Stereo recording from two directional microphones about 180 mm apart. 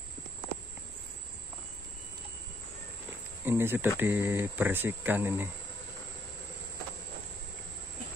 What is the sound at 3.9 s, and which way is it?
Speech, 10° right (ahead or behind).